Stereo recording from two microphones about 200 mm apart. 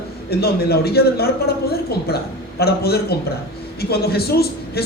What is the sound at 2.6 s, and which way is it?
A woman's voice, 50° left (ahead or behind).